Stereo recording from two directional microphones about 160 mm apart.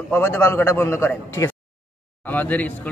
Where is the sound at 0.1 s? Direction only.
15° left (ahead or behind).